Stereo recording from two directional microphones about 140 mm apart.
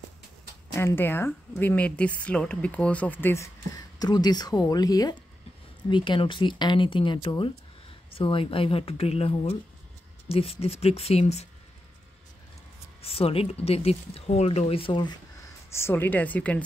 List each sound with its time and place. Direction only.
0.7 s speech: 15° left (ahead or behind); by 11.4 s 50° left (ahead or behind)
13.0 s speech: 45° left (ahead or behind)
15.7 s speech: 15° left (ahead or behind)